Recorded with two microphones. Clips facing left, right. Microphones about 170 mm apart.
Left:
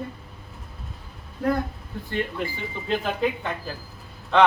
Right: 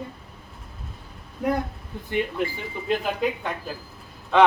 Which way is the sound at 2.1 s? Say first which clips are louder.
Right 3 dB; 10° right (ahead or behind).